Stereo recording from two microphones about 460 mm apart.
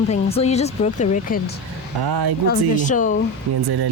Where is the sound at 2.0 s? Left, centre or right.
Right.